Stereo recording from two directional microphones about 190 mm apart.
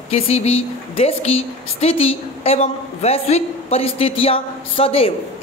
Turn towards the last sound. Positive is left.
turn(degrees=30)  # may be behind; listen again after turning